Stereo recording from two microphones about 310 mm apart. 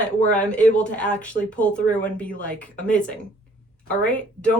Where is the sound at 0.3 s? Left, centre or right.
Centre.